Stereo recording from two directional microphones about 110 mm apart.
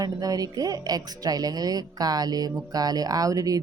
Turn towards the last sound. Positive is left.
turn(degrees=-35)  # may be behind; listen again after turning